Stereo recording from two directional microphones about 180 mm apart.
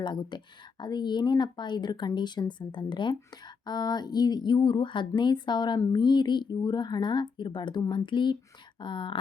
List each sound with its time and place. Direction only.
0.0 s speech: 25° left (ahead or behind)